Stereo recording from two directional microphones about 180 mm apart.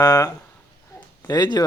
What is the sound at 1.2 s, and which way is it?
Speech, 20° left (ahead or behind).